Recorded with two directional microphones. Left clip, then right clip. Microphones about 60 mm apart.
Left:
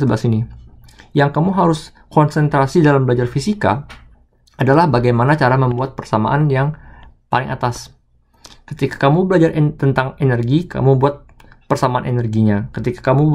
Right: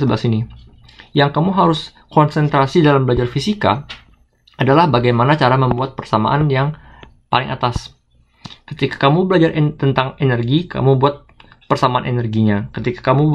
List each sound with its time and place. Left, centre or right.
0.0 s speech: left
3.1 s speech: left